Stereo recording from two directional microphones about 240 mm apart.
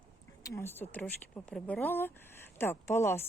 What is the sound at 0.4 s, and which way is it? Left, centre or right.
Speech, centre.